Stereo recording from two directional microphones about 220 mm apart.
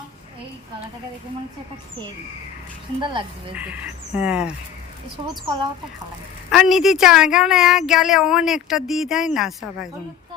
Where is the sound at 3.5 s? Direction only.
5° right (ahead or behind).